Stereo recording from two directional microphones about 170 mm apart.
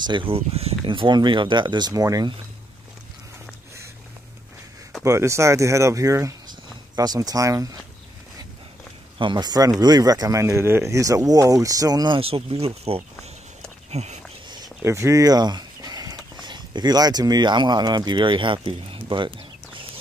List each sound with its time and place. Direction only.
0.0 s speech: 30° right (ahead or behind)
5.0 s speech: 15° right (ahead or behind)
9.2 s speech: 25° right (ahead or behind)
13.8 s a sound: 40° right (ahead or behind)
14.5 s speech: 20° right (ahead or behind)